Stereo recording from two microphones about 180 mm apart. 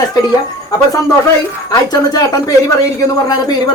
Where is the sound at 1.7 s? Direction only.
20° left (ahead or behind).